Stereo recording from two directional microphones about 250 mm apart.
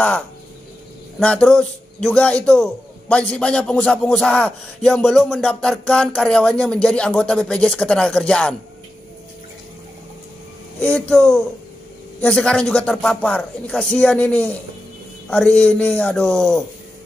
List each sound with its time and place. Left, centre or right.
1.2 s a man's voice: centre
10.8 s a man's voice: centre